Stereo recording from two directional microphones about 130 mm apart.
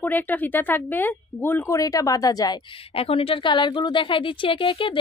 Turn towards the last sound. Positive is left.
turn(degrees=40)  # may be behind; listen again after turning